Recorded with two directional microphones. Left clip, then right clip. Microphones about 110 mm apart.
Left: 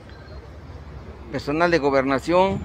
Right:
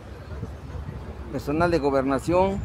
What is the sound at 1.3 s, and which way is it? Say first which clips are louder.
Speech: left 3 dB; centre (ahead or behind).